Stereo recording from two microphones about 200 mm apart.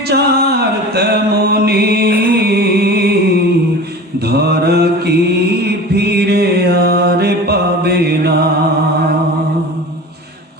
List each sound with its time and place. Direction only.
0.1 s music: 55° right (ahead or behind)
4.3 s mantra: 55° right (ahead or behind)